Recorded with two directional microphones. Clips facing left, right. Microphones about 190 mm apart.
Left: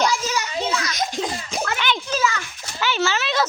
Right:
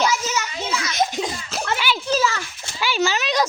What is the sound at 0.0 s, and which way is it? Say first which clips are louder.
Children playing: even; 5° right (ahead or behind).